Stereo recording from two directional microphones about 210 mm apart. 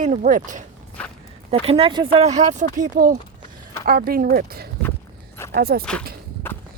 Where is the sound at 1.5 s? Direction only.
25° right (ahead or behind); by 5.8 s 45° right (ahead or behind).